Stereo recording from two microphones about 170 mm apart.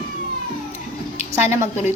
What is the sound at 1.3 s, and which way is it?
Speech, 15° right (ahead or behind).